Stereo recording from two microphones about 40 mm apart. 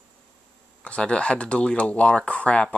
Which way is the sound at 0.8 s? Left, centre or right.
Left.